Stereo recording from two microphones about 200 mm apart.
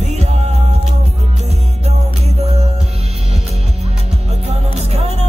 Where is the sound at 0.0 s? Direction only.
35° right (ahead or behind).